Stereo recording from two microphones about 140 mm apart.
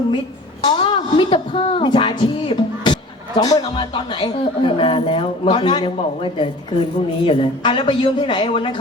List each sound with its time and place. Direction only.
0.6 s music: 35° left (ahead or behind)
3.8 s a man's voice: 35° left (ahead or behind)